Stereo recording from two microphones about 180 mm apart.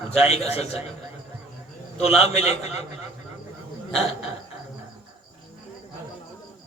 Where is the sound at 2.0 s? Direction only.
35° left (ahead or behind).